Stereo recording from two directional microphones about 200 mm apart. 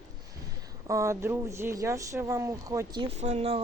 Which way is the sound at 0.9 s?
15° right (ahead or behind).